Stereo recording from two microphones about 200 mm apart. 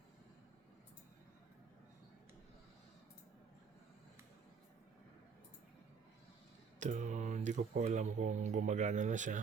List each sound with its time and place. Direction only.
6.7 s speech: 35° right (ahead or behind)